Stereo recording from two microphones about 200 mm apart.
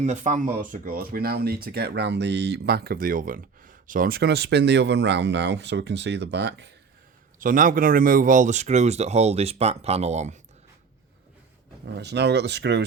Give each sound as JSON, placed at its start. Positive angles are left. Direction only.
{"t": 0.0, "sound": "speech", "side_deg": -35}
{"t": 7.3, "sound": "speech", "side_deg": -45}
{"t": 11.9, "sound": "speech", "side_deg": -55}